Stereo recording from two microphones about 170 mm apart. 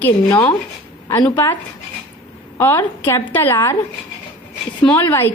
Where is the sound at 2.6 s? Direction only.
15° left (ahead or behind).